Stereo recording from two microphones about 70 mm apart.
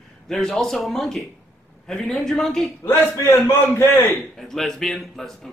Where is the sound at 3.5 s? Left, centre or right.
Left.